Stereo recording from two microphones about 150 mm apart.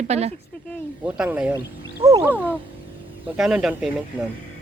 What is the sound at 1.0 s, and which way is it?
Speech, 5° right (ahead or behind).